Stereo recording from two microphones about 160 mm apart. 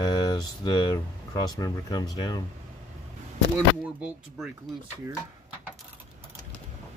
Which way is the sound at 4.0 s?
5° right (ahead or behind).